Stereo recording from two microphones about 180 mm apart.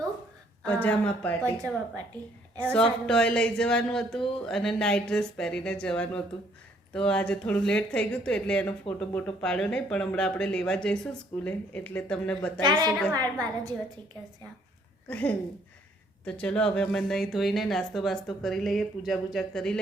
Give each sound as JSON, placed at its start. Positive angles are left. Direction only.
{"t": 0.6, "sound": "speech", "side_deg": 10}
{"t": 13.1, "sound": "a woman's voice", "side_deg": -20}
{"t": 15.0, "sound": "speech", "side_deg": 10}